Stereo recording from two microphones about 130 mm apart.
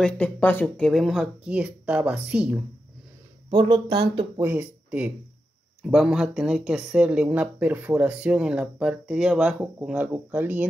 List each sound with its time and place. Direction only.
0.0 s speech: 10° left (ahead or behind)
1.2 s speech: 10° right (ahead or behind)
3.4 s speech: 40° right (ahead or behind)
4.4 s speech: 15° right (ahead or behind)